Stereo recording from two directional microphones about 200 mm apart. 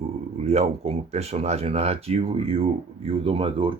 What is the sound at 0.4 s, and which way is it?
Speech, 30° right (ahead or behind).